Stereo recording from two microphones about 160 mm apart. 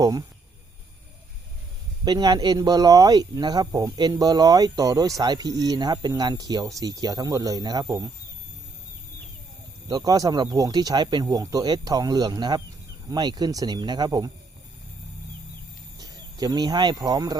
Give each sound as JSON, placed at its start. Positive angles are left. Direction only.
{"t": 0.0, "sound": "speech", "side_deg": -25}
{"t": 2.0, "sound": "speech", "side_deg": -25}
{"t": 9.9, "sound": "speech", "side_deg": -20}
{"t": 16.0, "sound": "speech", "side_deg": -25}